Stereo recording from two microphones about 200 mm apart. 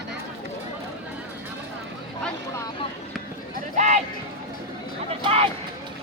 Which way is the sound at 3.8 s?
35° right (ahead or behind).